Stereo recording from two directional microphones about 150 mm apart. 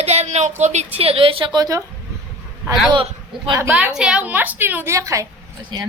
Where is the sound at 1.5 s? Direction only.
25° right (ahead or behind).